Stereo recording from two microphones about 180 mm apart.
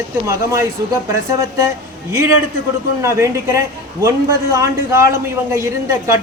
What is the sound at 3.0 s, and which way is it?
A man's voice, 15° right (ahead or behind).